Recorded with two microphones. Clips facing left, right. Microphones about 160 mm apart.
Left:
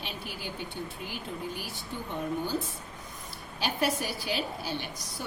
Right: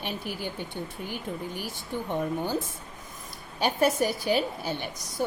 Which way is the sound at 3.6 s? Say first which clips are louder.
Right 6 dB; 50° right (ahead or behind).